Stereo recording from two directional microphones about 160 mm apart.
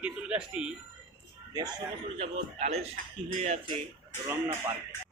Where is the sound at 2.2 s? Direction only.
40° right (ahead or behind).